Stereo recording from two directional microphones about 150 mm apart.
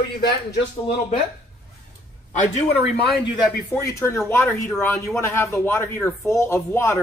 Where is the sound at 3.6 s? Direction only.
20° left (ahead or behind).